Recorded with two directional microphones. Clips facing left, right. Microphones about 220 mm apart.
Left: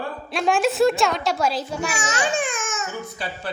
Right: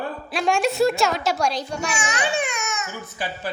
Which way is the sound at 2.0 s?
40° left (ahead or behind).